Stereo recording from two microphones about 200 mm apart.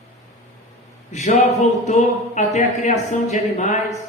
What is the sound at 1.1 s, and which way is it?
A man's voice, 35° left (ahead or behind).